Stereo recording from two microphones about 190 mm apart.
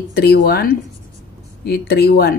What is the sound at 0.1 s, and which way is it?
A woman's voice, 55° left (ahead or behind).